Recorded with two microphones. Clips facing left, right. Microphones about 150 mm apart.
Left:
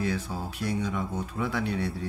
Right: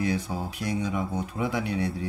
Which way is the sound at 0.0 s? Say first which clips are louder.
Right 2 dB; 15° right (ahead or behind).